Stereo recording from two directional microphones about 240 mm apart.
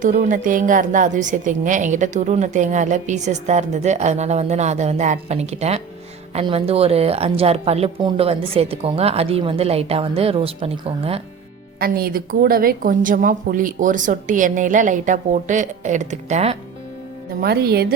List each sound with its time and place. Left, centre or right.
0.0 s a woman's voice: right
11.8 s a woman's voice: right
17.4 s a woman's voice: right